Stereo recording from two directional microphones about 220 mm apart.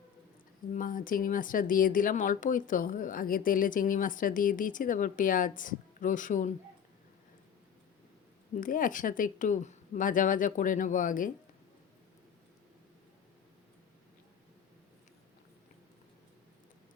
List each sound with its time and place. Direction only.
0.7 s speech: 40° left (ahead or behind)
8.5 s speech: 40° left (ahead or behind)